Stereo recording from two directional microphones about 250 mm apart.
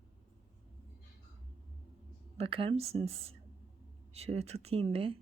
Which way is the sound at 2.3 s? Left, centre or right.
Right.